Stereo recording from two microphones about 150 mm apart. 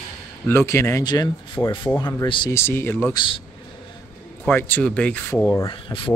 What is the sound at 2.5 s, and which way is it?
Speech, 15° left (ahead or behind).